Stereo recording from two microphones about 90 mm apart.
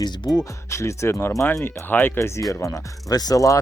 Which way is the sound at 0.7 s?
35° left (ahead or behind).